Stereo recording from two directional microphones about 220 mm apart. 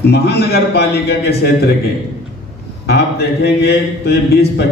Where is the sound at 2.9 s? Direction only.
50° left (ahead or behind).